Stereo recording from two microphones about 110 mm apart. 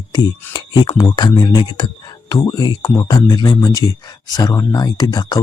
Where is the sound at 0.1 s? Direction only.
40° left (ahead or behind).